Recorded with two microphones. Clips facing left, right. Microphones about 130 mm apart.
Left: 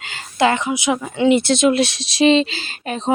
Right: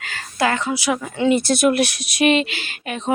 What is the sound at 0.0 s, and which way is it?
Speech, 25° left (ahead or behind).